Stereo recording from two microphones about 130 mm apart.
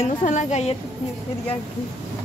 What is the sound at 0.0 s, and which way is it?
Speech, 70° left (ahead or behind).